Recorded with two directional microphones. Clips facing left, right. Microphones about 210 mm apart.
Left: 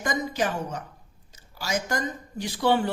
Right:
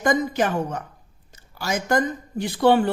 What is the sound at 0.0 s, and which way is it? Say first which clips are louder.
A woman's voice: right 6 dB; 55° right (ahead or behind).